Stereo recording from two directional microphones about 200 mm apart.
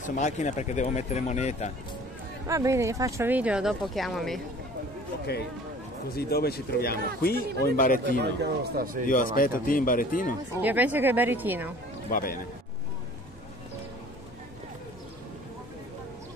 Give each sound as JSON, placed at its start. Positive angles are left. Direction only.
{"t": 0.0, "sound": "speech", "side_deg": 40}
{"t": 2.4, "sound": "speech", "side_deg": -15}
{"t": 5.2, "sound": "speech", "side_deg": 55}
{"t": 8.2, "sound": "a man's voice", "side_deg": -55}
{"t": 9.0, "sound": "speech", "side_deg": 45}
{"t": 10.6, "sound": "speech", "side_deg": -10}
{"t": 12.1, "sound": "speech", "side_deg": 45}